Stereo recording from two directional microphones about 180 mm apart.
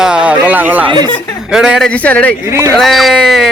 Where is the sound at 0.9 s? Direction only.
25° right (ahead or behind).